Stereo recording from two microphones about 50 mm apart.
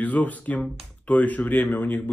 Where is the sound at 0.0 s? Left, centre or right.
Left.